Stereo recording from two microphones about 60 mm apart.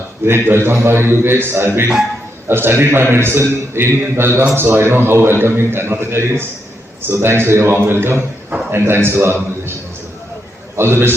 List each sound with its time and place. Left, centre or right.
0.3 s a man's voice: right
10.8 s a man's voice: right